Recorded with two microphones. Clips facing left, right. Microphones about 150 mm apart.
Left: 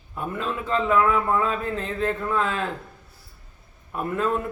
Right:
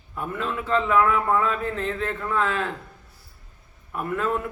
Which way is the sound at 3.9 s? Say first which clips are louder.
Left 1 dB; 25° left (ahead or behind).